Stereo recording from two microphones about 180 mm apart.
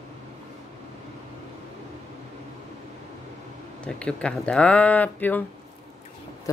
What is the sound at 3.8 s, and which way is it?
Speech, 5° left (ahead or behind).